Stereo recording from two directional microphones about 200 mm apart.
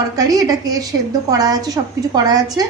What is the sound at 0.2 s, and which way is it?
A woman's voice, 20° right (ahead or behind).